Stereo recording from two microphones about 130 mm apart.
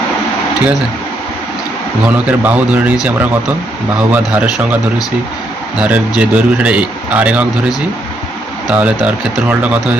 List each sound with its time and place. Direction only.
2.0 s speech: 10° right (ahead or behind)
5.8 s speech: 10° right (ahead or behind)